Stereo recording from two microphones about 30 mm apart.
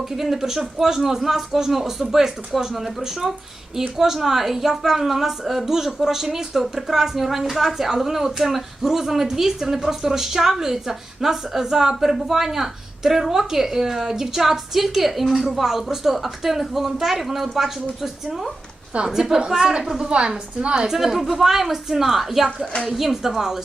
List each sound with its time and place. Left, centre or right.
0.0 s a woman's voice: centre
2.5 s speech: centre
3.0 s a woman's voice: centre
15.6 s a woman's voice: centre
20.1 s a woman's voice: right
20.8 s a woman's voice: centre